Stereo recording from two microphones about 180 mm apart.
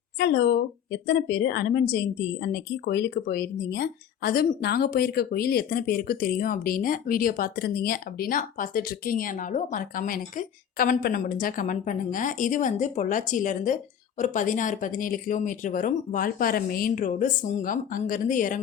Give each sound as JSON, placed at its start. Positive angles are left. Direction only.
{"t": 0.2, "sound": "a woman's voice", "side_deg": 70}